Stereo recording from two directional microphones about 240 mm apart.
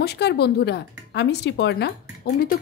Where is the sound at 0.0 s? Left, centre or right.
Left.